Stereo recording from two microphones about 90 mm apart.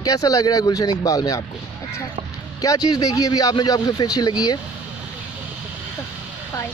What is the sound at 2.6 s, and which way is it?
Speech, 40° left (ahead or behind).